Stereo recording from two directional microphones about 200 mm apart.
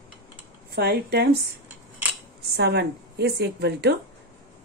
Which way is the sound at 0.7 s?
55° right (ahead or behind).